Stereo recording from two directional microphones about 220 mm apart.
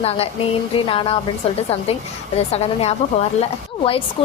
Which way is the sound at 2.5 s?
30° left (ahead or behind).